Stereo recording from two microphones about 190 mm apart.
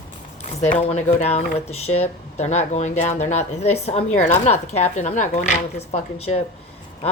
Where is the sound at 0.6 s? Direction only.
35° left (ahead or behind).